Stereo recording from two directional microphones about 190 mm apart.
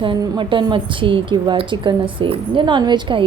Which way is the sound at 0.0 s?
25° right (ahead or behind).